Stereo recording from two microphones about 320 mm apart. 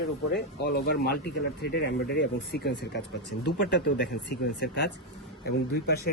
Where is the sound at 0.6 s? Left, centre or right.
Left.